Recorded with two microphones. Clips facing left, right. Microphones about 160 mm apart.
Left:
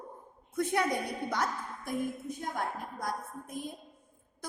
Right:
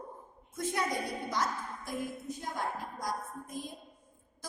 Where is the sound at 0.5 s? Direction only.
60° left (ahead or behind).